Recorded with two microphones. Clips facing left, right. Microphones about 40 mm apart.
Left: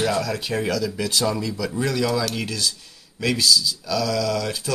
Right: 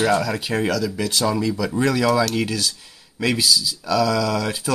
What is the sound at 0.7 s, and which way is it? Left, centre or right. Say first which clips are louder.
Speech: right 1 dB; centre.